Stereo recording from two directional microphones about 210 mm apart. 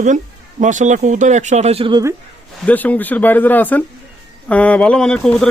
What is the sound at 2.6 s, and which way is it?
A man's voice, 5° left (ahead or behind).